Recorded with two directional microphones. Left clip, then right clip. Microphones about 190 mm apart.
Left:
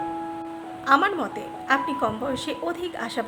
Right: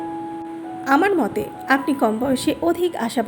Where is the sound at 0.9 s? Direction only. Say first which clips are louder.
Right 3 dB; 15° right (ahead or behind).